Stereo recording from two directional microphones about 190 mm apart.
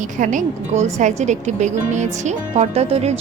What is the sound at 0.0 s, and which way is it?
Speech, 40° right (ahead or behind).